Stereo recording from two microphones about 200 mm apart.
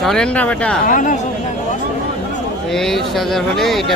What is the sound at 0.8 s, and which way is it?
Speech, 40° left (ahead or behind).